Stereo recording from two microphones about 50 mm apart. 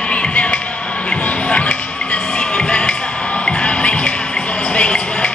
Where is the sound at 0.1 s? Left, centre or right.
Left.